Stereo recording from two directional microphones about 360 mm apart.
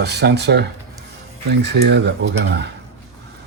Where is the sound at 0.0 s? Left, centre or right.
Right.